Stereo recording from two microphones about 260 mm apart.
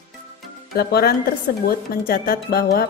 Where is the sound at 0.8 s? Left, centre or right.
Left.